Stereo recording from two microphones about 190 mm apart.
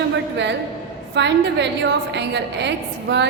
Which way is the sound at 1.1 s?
65° right (ahead or behind).